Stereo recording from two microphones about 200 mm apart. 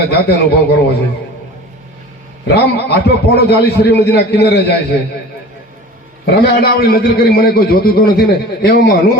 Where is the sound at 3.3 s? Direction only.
55° left (ahead or behind).